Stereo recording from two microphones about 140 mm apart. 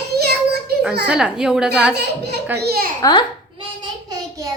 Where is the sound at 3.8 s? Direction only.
25° right (ahead or behind).